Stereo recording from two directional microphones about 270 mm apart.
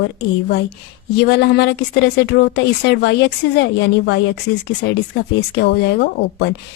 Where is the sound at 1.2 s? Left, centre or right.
Left.